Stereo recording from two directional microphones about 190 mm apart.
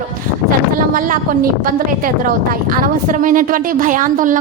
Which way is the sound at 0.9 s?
45° right (ahead or behind).